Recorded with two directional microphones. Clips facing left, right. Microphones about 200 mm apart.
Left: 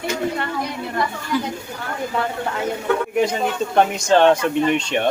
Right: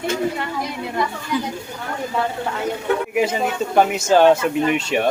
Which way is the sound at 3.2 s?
5° right (ahead or behind).